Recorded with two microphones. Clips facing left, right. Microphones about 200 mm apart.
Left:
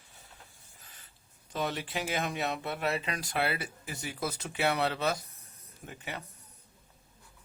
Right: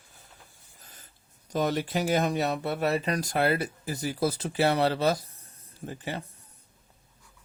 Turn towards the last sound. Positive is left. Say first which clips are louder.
# right 7 dB
turn(degrees=-30)  # may be behind; listen again after turning